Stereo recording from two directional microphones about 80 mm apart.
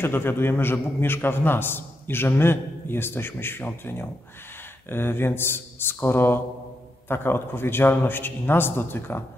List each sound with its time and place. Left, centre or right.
0.0 s a man's voice: left